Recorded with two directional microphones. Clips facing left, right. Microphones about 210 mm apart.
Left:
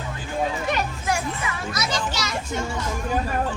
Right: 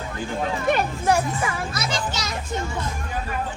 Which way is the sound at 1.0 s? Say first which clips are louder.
Right 5 dB; 35° right (ahead or behind).